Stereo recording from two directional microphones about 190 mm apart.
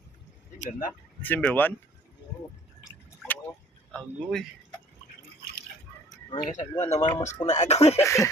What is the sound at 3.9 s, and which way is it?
Speech, centre (ahead or behind).